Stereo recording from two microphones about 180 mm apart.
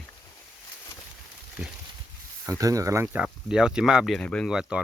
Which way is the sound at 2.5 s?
20° right (ahead or behind).